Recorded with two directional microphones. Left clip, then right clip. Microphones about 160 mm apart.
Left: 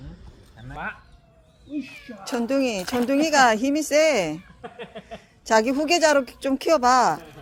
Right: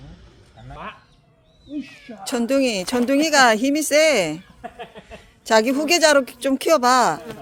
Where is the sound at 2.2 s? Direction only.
45° right (ahead or behind).